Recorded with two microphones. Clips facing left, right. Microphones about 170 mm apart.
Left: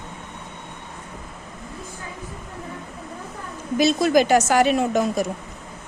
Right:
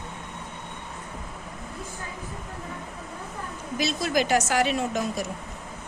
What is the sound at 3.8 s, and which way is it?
A woman's voice, 50° left (ahead or behind).